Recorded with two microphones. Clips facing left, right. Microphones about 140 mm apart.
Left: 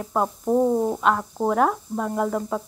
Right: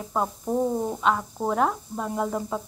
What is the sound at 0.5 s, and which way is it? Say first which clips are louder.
Speech: left 6 dB; 20° left (ahead or behind).